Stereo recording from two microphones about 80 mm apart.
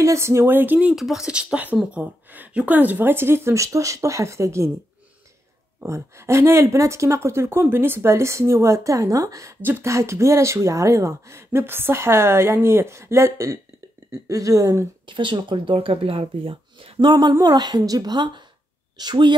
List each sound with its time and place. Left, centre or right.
0.0 s speech: right
0.9 s speech: centre; by 4.6 s right
5.9 s speech: right
9.6 s speech: right
9.8 s a woman's voice: right
15.0 s speech: right
17.0 s a woman's voice: right
17.3 s a woman's voice: right